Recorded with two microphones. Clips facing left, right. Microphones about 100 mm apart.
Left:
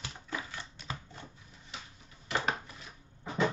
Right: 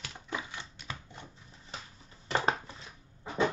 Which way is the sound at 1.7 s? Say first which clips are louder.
Right 2 dB; 35° right (ahead or behind).